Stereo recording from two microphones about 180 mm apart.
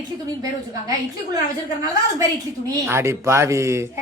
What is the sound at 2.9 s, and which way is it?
Speech, 15° right (ahead or behind).